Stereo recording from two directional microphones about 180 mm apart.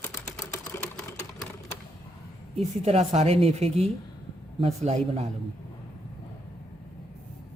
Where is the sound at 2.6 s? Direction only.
35° right (ahead or behind).